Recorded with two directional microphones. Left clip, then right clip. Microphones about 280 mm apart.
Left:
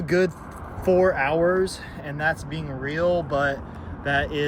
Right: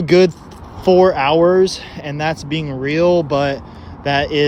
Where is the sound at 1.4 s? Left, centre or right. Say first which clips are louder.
Right 9 dB; centre.